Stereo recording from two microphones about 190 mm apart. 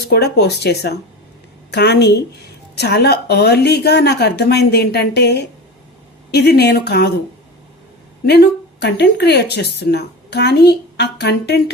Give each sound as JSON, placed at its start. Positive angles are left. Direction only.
{"t": 0.1, "sound": "speech", "side_deg": 60}
{"t": 8.3, "sound": "speech", "side_deg": 60}